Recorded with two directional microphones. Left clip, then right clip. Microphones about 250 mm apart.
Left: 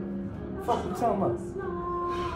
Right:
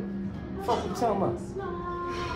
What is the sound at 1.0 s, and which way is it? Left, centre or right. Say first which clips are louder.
Speech: even; centre.